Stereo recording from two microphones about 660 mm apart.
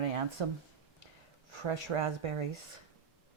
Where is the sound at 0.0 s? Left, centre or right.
Right.